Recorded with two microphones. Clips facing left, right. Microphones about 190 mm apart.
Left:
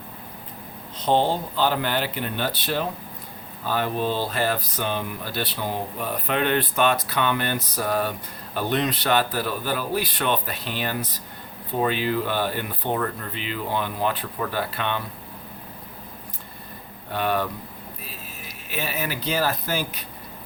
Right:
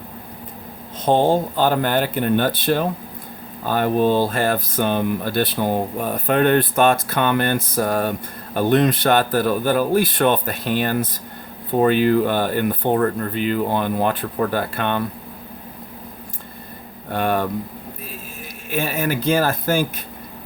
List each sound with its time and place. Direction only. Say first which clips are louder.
1.0 s speech: right 5 dB; 50° right (ahead or behind)
17.1 s speech: right 4 dB; 50° right (ahead or behind)
18.7 s speech: right 7 dB; 50° right (ahead or behind)